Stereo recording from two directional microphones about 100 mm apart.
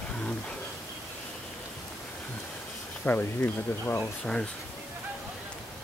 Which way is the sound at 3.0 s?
20° left (ahead or behind).